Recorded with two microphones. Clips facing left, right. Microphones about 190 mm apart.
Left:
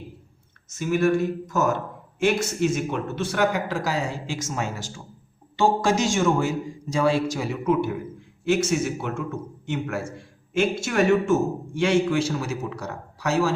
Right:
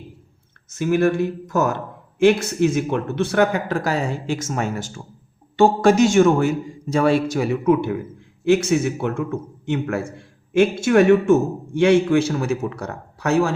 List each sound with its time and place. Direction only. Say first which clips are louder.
0.7 s a man's voice: right 3 dB; 60° right (ahead or behind)